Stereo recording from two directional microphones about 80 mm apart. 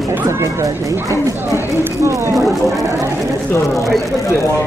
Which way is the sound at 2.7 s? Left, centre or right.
Right.